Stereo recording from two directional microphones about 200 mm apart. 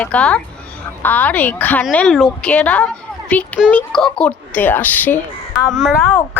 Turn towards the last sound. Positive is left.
turn(degrees=0)  # may be behind; listen again after turning